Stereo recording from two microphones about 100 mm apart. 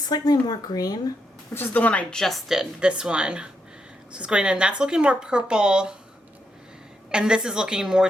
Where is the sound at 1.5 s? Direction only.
20° left (ahead or behind); by 5.9 s 10° right (ahead or behind).